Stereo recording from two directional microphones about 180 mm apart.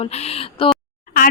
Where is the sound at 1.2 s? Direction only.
55° left (ahead or behind).